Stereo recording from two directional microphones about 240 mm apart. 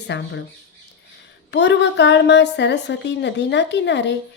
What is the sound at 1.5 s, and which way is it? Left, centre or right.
A woman's voice, left.